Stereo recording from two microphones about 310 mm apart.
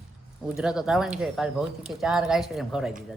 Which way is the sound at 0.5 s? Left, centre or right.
Centre.